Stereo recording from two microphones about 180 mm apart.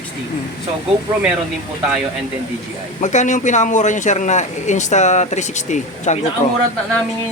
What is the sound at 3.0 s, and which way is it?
Speech, 40° left (ahead or behind).